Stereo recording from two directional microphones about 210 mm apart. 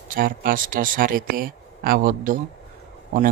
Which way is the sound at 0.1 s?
40° right (ahead or behind).